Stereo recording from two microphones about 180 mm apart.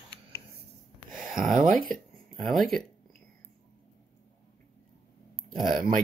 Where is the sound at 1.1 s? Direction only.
Centre (ahead or behind).